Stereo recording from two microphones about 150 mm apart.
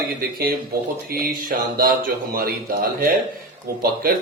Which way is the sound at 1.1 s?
75° right (ahead or behind).